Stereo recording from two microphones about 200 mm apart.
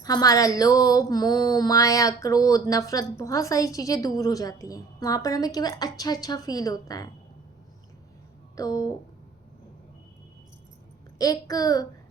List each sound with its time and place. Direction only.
0.0 s speech: 20° left (ahead or behind)
8.5 s speech: 15° left (ahead or behind)
11.2 s speech: 20° left (ahead or behind)